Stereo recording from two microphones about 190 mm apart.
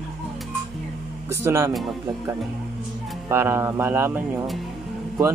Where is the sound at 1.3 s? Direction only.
15° right (ahead or behind).